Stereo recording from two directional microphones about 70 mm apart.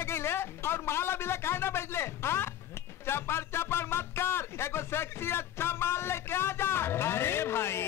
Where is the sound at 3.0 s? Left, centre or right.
Left.